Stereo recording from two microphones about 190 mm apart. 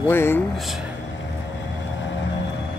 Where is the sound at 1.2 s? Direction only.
75° left (ahead or behind).